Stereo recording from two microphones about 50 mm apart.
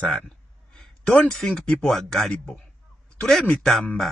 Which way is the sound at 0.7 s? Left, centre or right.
Centre.